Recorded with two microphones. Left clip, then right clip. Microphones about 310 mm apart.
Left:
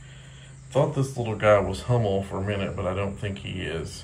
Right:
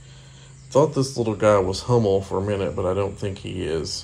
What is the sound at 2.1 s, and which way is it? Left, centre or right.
Speech, centre.